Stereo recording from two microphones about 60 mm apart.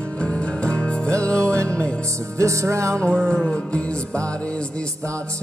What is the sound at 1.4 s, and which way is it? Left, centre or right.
Music, right.